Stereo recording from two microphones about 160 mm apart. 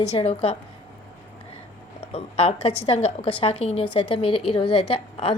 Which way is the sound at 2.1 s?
35° left (ahead or behind).